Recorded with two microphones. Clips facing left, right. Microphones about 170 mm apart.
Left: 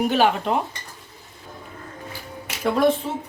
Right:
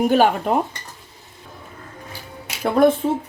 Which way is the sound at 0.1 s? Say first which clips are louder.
Right 3 dB; 45° right (ahead or behind).